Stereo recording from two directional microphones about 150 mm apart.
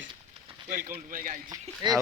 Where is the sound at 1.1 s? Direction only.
65° right (ahead or behind).